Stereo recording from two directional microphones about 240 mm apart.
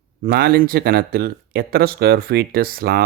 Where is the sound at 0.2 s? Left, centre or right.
Right.